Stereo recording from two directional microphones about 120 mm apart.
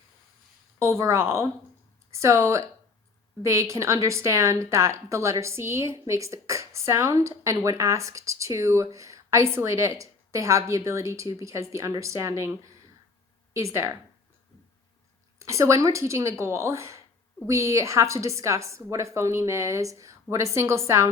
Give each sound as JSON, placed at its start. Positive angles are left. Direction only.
{"t": 0.8, "sound": "a woman's voice", "side_deg": -25}
{"t": 15.4, "sound": "a woman's voice", "side_deg": -25}